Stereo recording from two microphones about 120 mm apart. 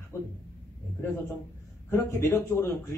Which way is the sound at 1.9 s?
25° left (ahead or behind).